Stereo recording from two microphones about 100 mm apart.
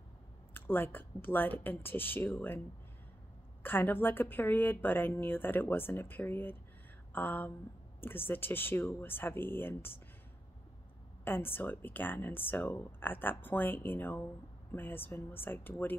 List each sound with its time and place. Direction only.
0.6 s speech: 20° left (ahead or behind)
3.6 s speech: 20° left (ahead or behind)
11.2 s speech: 20° left (ahead or behind)